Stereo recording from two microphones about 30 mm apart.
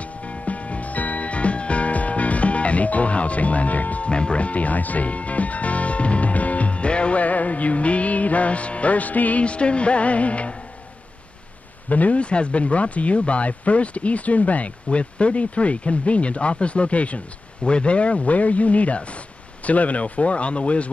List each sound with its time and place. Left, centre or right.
0.0 s music: left
4.1 s music: left
7.2 s music: left
9.4 s speech: left
11.9 s speech: left
12.2 s speech: left
14.9 s speech: left